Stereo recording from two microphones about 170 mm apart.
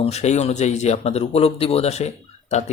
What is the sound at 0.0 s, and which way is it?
A man's voice, 40° left (ahead or behind).